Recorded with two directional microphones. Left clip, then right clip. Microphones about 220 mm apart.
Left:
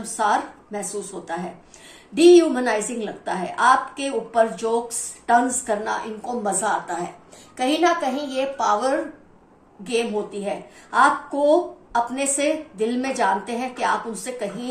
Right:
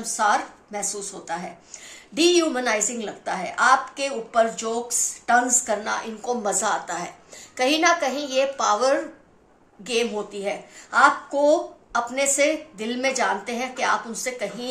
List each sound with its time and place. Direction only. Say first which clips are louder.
0.0 s a woman's voice: even; 40° right (ahead or behind)